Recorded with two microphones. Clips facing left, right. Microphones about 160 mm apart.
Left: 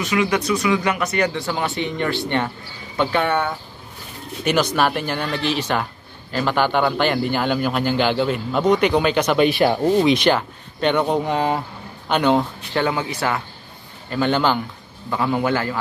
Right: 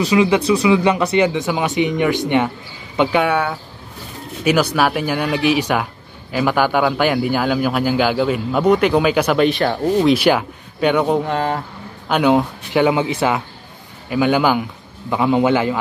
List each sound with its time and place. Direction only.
0.0 s speech: 30° right (ahead or behind)
1.2 s a man's voice: 15° right (ahead or behind)